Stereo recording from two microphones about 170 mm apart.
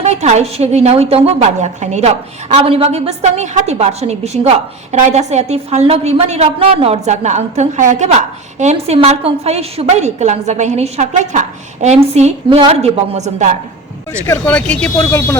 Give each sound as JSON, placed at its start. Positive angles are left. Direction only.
{"t": 0.0, "sound": "a woman's voice", "side_deg": -40}
{"t": 14.3, "sound": "speech", "side_deg": 10}